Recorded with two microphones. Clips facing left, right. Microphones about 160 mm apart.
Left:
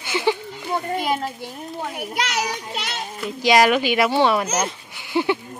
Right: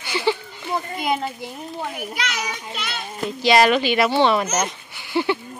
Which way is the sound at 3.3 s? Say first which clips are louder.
Even; 10° left (ahead or behind).